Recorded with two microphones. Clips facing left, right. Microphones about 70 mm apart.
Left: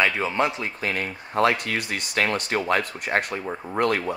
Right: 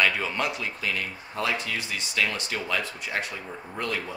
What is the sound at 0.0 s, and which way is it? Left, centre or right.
Speech, left.